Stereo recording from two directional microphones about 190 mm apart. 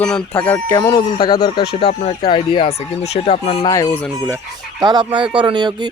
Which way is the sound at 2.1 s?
30° left (ahead or behind).